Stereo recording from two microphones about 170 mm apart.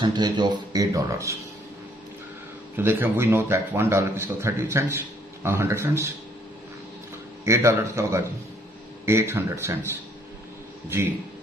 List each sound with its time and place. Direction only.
0.0 s speech: 25° right (ahead or behind)
2.7 s a man's voice: 10° right (ahead or behind)
7.4 s a man's voice: 15° right (ahead or behind)